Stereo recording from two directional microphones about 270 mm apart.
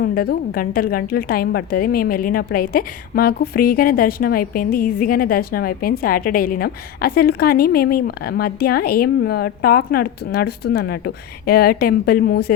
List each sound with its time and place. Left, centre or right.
0.0 s a woman's voice: left